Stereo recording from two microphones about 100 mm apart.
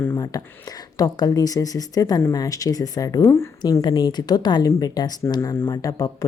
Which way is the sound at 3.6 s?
40° left (ahead or behind).